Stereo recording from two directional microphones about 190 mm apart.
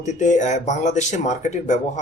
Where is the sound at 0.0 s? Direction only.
40° left (ahead or behind).